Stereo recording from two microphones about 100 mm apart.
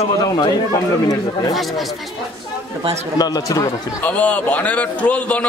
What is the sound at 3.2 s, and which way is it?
Speech, 40° left (ahead or behind).